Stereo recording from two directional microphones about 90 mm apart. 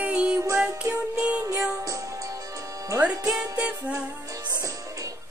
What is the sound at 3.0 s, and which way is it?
Music, 10° right (ahead or behind).